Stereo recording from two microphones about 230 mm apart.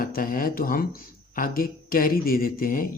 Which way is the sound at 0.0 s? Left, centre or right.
Left.